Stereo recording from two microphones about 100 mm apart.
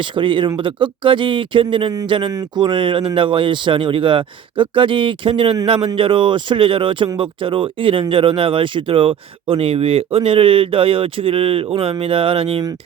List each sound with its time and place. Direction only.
0.0 s speech: 55° right (ahead or behind); by 12.6 s 70° right (ahead or behind)